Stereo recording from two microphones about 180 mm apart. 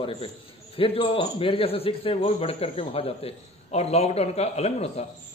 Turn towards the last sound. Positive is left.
turn(degrees=35)  # may be behind; listen again after turning